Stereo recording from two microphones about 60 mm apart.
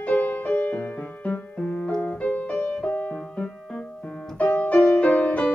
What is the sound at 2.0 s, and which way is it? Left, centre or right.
Piano, left.